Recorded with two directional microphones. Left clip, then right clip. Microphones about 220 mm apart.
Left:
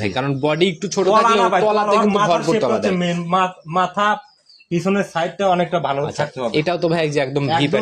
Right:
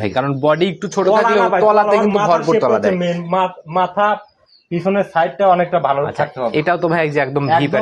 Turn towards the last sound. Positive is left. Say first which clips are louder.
# right 3 dB
turn(degrees=5)  # may be behind; listen again after turning